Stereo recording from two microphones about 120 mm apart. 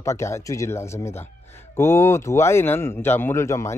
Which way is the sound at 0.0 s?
25° left (ahead or behind).